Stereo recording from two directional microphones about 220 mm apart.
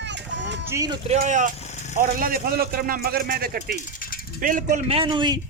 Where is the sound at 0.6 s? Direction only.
15° right (ahead or behind).